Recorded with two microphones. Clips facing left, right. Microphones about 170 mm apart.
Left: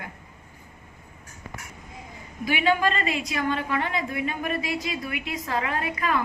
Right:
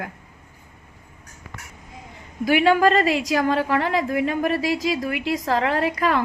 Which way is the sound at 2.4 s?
85° right.